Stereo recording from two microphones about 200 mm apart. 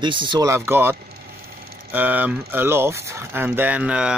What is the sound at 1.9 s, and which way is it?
Speech, 10° right (ahead or behind).